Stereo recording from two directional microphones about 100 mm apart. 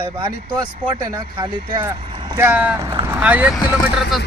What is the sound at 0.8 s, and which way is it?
Speech, 45° right (ahead or behind).